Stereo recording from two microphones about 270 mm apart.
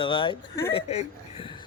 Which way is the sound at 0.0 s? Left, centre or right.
Centre.